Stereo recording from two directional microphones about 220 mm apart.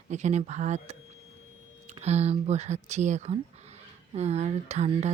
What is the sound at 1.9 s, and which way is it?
Speech, 30° right (ahead or behind).